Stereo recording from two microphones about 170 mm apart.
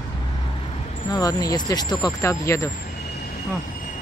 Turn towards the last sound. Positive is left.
turn(degrees=55)  # may be behind; listen again after turning